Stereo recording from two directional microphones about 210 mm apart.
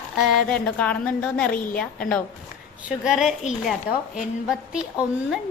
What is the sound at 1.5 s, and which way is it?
Speech, 40° left (ahead or behind).